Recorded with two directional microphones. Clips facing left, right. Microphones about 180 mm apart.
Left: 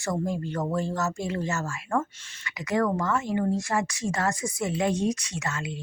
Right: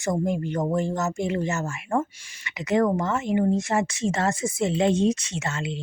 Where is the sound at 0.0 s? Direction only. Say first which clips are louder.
Right 4 dB; 20° right (ahead or behind).